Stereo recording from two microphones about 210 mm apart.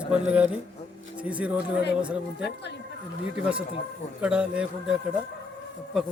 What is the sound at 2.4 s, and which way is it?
Speech, 55° left (ahead or behind).